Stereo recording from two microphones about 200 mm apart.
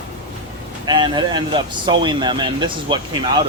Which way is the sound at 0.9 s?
20° right (ahead or behind).